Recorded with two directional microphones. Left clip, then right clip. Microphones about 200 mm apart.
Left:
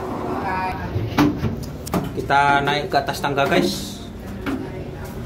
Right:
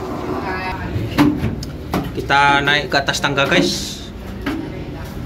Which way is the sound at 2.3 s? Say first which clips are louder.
Right 3 dB; 5° left (ahead or behind).